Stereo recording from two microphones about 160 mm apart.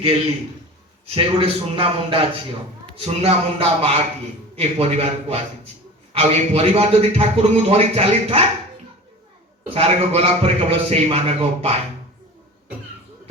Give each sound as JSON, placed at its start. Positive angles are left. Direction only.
{"t": 1.1, "sound": "speech", "side_deg": -35}
{"t": 9.6, "sound": "speech", "side_deg": -40}